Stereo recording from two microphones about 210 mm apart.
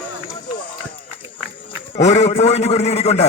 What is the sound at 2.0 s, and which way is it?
A man's voice, 30° left (ahead or behind).